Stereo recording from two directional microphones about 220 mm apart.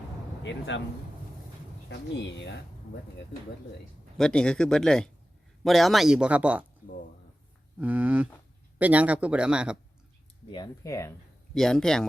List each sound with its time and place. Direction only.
0.4 s speech: 55° left (ahead or behind)
2.4 s speech: 50° left (ahead or behind)
4.2 s speech: 5° left (ahead or behind)
7.8 s speech: 5° right (ahead or behind)
10.5 s speech: 15° left (ahead or behind)
11.5 s speech: centre (ahead or behind)